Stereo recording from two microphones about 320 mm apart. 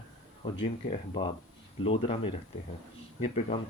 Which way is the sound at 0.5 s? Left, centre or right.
Centre.